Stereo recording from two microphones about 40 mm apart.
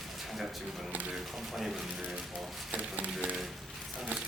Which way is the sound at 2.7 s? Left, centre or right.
Right.